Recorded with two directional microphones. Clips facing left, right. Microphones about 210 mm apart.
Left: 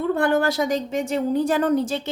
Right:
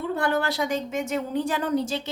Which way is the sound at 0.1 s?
50° left (ahead or behind).